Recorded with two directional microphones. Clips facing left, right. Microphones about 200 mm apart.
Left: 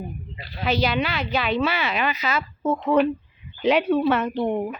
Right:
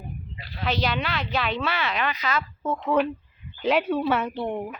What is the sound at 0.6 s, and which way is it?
Speech, 5° left (ahead or behind).